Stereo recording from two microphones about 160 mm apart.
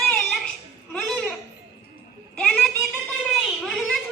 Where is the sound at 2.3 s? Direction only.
5° left (ahead or behind).